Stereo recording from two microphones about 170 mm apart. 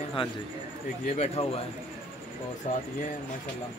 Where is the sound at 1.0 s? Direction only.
40° left (ahead or behind).